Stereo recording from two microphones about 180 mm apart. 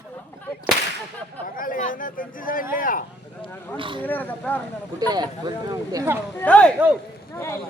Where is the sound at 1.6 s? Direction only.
50° left (ahead or behind).